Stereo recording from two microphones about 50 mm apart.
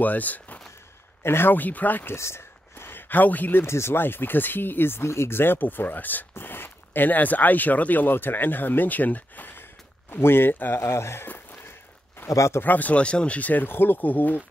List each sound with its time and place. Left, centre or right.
0.0 s speech: left
1.2 s speech: left
1.5 s speech: left
2.1 s a sound: left
3.6 s speech: left
10.8 s speech: left
11.2 s walk: left
12.3 s speech: left
12.6 s speech: left
13.0 s speech: left